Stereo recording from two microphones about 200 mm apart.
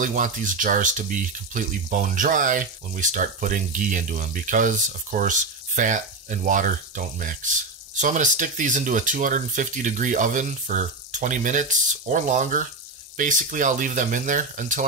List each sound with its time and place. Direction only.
0.0 s speech: 40° right (ahead or behind)